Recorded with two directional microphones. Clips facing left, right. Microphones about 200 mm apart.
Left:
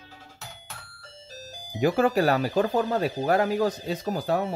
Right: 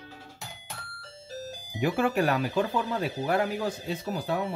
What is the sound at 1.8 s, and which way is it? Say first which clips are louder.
Speech: left 4 dB; 40° left (ahead or behind).